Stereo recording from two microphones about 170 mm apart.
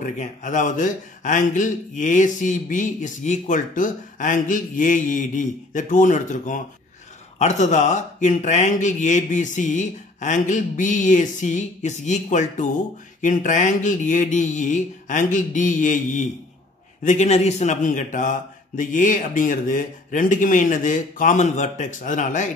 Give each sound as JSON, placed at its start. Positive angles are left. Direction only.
{"t": 0.0, "sound": "a man's voice", "side_deg": 45}